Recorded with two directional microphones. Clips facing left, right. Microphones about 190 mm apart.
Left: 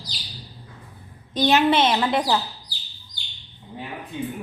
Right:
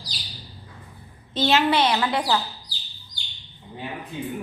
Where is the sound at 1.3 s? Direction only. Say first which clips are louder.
Left 2 dB; 15° left (ahead or behind).